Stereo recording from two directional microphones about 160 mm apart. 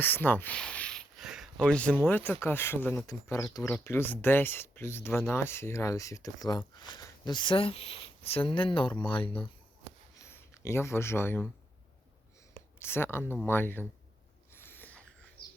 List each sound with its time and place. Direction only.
0.0 s speech: 10° left (ahead or behind); by 9.3 s 30° left (ahead or behind)
10.2 s speech: 15° left (ahead or behind)
12.8 s speech: 15° left (ahead or behind)
14.5 s a sound: 15° left (ahead or behind)